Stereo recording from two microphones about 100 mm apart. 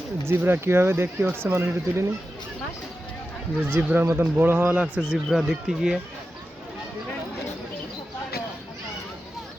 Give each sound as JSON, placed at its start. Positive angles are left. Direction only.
{"t": 0.3, "sound": "speech", "side_deg": -25}
{"t": 3.7, "sound": "speech", "side_deg": -20}